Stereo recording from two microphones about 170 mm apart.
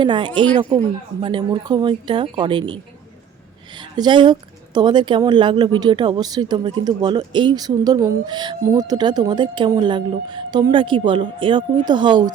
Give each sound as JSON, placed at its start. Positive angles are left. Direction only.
{"t": 0.0, "sound": "speech", "side_deg": -30}